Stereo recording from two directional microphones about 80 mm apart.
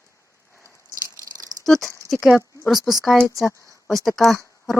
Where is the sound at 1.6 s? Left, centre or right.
Centre.